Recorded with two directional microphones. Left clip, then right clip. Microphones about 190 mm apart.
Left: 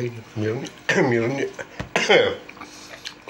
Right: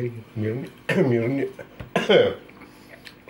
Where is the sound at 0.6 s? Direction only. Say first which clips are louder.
Left 2 dB; 10° right (ahead or behind).